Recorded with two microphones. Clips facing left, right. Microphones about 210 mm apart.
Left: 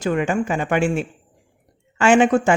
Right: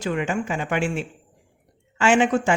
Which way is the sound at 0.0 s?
45° left (ahead or behind).